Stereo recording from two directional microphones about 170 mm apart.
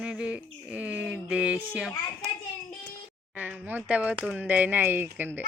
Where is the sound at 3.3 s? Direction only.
10° right (ahead or behind).